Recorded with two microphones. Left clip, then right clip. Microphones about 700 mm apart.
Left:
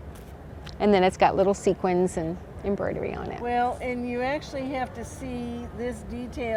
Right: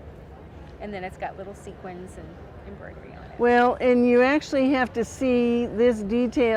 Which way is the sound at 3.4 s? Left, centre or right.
Right.